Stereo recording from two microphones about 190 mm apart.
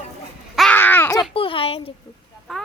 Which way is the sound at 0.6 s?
5° left (ahead or behind).